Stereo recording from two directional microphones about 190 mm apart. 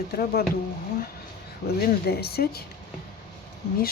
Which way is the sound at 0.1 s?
55° left (ahead or behind).